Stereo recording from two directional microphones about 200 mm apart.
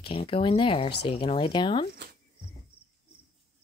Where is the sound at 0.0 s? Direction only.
25° left (ahead or behind).